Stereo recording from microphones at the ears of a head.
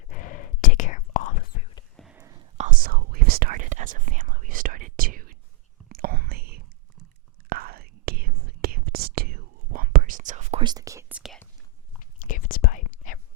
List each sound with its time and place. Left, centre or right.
0.1 s whispering: left
2.1 s whispering: right
11.1 s whispering: centre
12.2 s whispering: left